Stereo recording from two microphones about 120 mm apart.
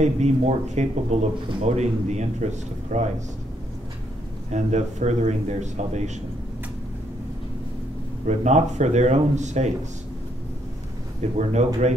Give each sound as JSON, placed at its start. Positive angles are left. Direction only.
{"t": 0.0, "sound": "speech", "side_deg": -75}
{"t": 4.5, "sound": "speech", "side_deg": -75}
{"t": 8.3, "sound": "speech", "side_deg": -70}
{"t": 11.3, "sound": "speech", "side_deg": -70}